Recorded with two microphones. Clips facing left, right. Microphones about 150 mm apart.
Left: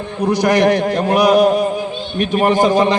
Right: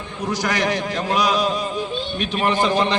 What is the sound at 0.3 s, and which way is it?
A man's voice, 55° left (ahead or behind).